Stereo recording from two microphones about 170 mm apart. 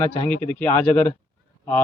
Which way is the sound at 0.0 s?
10° left (ahead or behind).